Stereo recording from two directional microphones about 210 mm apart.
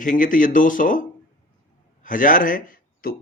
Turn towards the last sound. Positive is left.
turn(degrees=45)  # may be behind; listen again after turning